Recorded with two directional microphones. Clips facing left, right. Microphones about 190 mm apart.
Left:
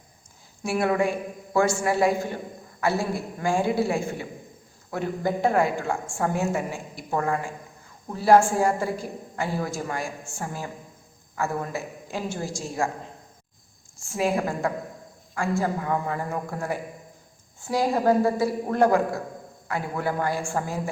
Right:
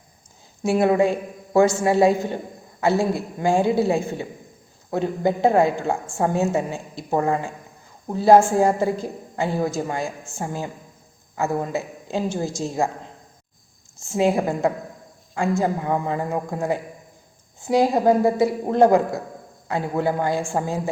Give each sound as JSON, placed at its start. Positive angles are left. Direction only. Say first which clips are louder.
{"t": 0.6, "sound": "a woman's voice", "louder": "right 5 dB", "side_deg": -20}
{"t": 14.0, "sound": "a woman's voice", "louder": "right 5 dB", "side_deg": -20}